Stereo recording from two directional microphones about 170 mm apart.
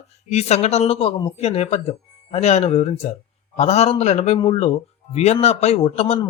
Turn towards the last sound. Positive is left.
turn(degrees=35)  # may be behind; listen again after turning